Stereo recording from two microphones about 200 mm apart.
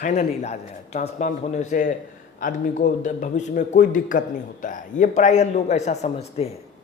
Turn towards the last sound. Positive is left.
turn(degrees=30)  # may be behind; listen again after turning